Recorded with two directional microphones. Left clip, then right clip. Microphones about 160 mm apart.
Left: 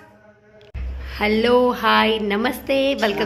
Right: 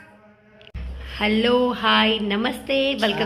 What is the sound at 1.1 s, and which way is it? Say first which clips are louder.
A man's voice: left 3 dB; 10° left (ahead or behind).